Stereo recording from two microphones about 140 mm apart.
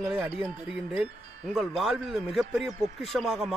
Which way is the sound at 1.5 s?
Centre (ahead or behind).